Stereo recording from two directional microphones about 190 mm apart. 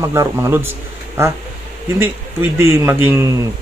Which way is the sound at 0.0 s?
15° right (ahead or behind).